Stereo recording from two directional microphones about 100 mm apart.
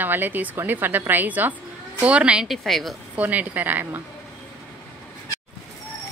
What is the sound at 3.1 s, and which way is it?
Speech, 15° right (ahead or behind).